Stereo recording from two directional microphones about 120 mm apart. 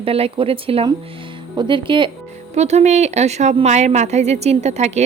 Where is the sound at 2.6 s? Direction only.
65° right (ahead or behind).